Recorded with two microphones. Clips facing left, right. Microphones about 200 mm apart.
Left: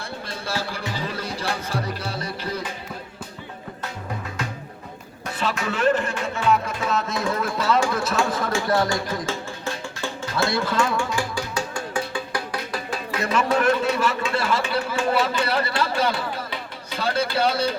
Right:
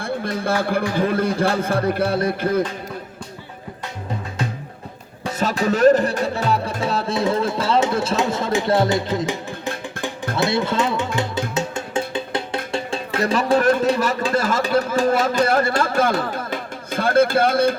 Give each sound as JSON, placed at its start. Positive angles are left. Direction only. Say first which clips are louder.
{"t": 0.4, "sound": "speech", "louder": "right 8 dB", "side_deg": -55}
{"t": 5.2, "sound": "music", "louder": "right 6 dB", "side_deg": -40}
{"t": 12.7, "sound": "a man's voice", "louder": "right 6 dB", "side_deg": -30}